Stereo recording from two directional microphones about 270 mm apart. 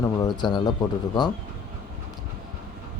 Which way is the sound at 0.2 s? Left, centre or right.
Centre.